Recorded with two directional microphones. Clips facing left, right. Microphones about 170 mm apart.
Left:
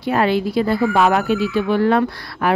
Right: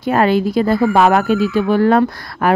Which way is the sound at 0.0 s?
45° right (ahead or behind).